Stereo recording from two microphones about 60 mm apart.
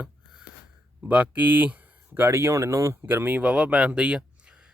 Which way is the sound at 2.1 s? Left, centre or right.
Right.